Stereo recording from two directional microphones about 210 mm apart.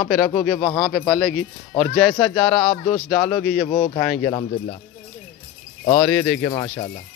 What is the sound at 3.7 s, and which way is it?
Speech, 20° left (ahead or behind).